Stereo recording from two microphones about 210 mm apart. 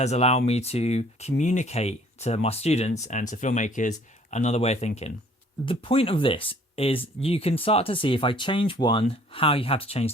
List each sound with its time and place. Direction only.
0.0 s speech: 30° left (ahead or behind)